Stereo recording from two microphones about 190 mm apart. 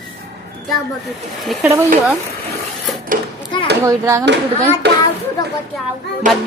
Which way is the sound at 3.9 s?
15° right (ahead or behind).